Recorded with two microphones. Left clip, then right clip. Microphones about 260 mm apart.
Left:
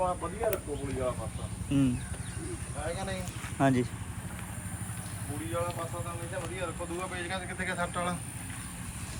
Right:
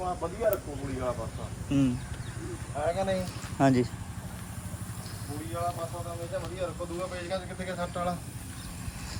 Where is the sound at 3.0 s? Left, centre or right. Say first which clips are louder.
Right 8 dB; right.